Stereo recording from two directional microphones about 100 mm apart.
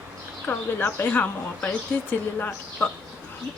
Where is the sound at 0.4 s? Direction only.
20° left (ahead or behind).